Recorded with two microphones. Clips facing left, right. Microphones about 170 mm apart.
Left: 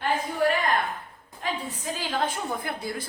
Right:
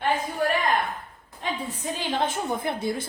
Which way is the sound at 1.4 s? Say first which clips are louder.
Right 1 dB; 25° right (ahead or behind).